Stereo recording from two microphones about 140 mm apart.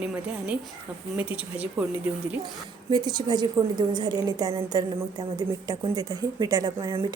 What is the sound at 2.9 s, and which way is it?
Speech, 30° right (ahead or behind).